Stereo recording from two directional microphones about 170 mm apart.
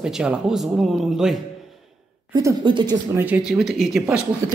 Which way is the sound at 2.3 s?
25° right (ahead or behind).